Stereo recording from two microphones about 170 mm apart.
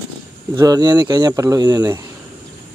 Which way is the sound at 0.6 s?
20° right (ahead or behind).